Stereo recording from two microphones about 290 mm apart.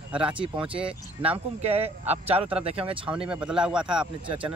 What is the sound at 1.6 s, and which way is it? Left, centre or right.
Speech, right.